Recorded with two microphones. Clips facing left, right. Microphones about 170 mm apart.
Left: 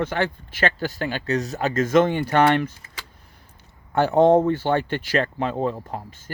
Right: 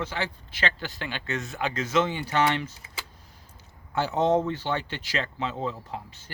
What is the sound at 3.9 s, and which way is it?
Speech, 55° left (ahead or behind).